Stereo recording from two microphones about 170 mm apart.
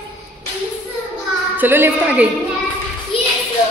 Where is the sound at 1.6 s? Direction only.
10° right (ahead or behind).